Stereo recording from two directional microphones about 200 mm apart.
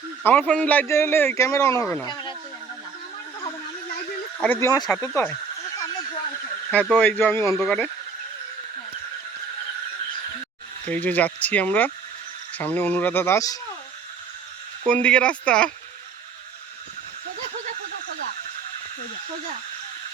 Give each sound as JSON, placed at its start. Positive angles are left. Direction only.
{"t": 0.3, "sound": "speech", "side_deg": 10}
{"t": 4.4, "sound": "speech", "side_deg": 10}
{"t": 4.9, "sound": "a sound", "side_deg": 10}
{"t": 6.7, "sound": "speech", "side_deg": 5}
{"t": 10.8, "sound": "speech", "side_deg": 10}
{"t": 14.8, "sound": "speech", "side_deg": 5}